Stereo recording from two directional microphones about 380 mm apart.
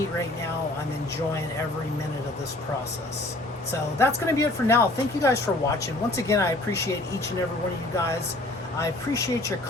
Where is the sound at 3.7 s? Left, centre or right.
Centre.